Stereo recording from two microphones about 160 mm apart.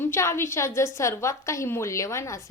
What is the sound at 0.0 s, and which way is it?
A woman's voice, 15° left (ahead or behind).